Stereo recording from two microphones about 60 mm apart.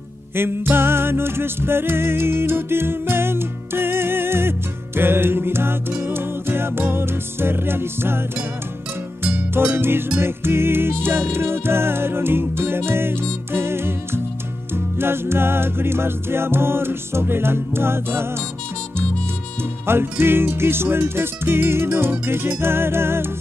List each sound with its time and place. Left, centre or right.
0.4 s music: right
9.8 s music: right
19.9 s music: right